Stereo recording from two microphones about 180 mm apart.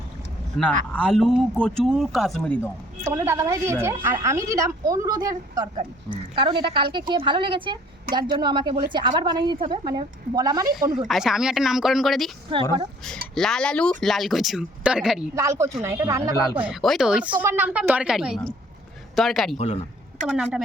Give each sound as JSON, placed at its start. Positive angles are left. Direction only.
{"t": 0.6, "sound": "speech", "side_deg": 5}
{"t": 3.0, "sound": "a woman's voice", "side_deg": -15}
{"t": 11.1, "sound": "speech", "side_deg": 0}
{"t": 13.3, "sound": "speech", "side_deg": 5}
{"t": 15.4, "sound": "a woman's voice", "side_deg": -15}
{"t": 16.6, "sound": "speech", "side_deg": -5}
{"t": 19.5, "sound": "speech", "side_deg": 35}
{"t": 20.2, "sound": "speech", "side_deg": -5}